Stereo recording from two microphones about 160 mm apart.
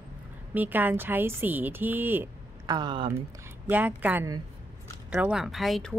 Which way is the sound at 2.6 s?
25° right (ahead or behind).